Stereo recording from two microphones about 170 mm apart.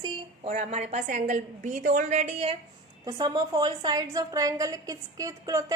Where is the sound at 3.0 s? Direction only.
25° right (ahead or behind).